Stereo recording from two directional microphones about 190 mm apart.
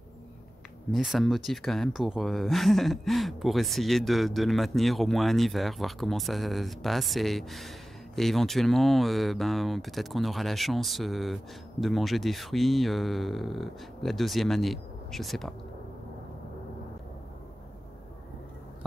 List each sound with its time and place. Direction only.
0.9 s speech: centre (ahead or behind)